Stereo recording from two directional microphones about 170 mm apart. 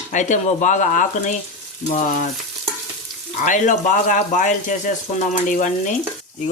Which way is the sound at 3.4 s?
45° left (ahead or behind).